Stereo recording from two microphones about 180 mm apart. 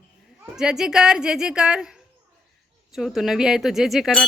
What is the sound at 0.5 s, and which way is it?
Speech, 5° right (ahead or behind).